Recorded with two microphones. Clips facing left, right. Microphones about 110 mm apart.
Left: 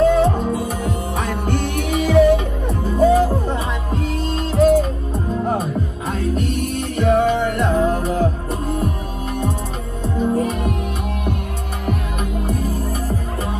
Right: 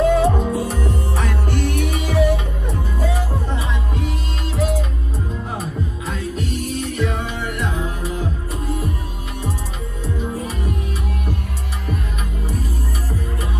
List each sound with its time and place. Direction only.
0.0 s music: 5° right (ahead or behind)
1.1 s music: 15° left (ahead or behind)
1.5 s music: 50° left (ahead or behind)
6.0 s music: 50° left (ahead or behind)
10.0 s music: 55° left (ahead or behind)